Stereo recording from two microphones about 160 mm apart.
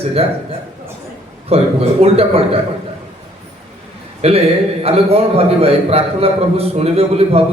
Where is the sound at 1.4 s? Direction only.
40° right (ahead or behind).